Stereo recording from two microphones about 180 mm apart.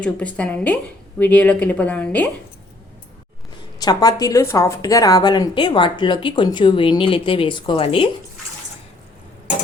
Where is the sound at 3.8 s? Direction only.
20° left (ahead or behind).